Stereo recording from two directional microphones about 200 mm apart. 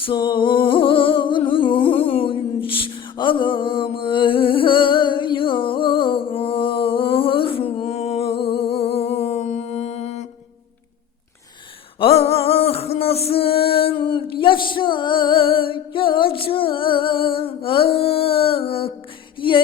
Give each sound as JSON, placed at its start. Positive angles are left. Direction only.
{"t": 0.0, "sound": "humming", "side_deg": 25}
{"t": 11.9, "sound": "music", "side_deg": 30}
{"t": 19.4, "sound": "a sound", "side_deg": 25}